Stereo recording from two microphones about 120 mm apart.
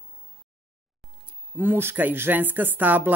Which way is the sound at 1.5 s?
15° right (ahead or behind).